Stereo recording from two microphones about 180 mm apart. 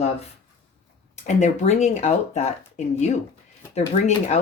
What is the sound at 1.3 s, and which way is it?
Speech, 40° left (ahead or behind).